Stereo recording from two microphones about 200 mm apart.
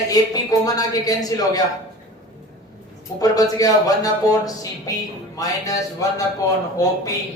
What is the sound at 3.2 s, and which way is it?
A man's voice, 20° left (ahead or behind).